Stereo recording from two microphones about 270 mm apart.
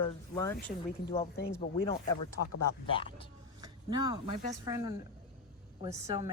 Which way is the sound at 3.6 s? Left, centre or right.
Centre.